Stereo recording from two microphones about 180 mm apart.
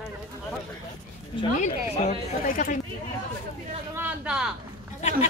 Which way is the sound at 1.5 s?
45° left (ahead or behind).